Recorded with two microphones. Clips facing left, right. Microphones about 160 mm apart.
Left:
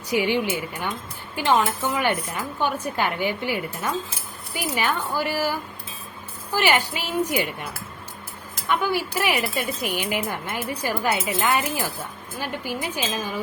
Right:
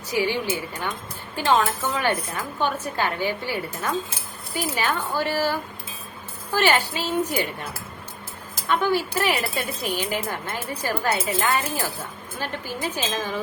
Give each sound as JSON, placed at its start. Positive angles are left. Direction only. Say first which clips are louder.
{"t": 0.2, "sound": "speech", "louder": "even", "side_deg": 15}
{"t": 8.7, "sound": "speech", "louder": "right 1 dB", "side_deg": 10}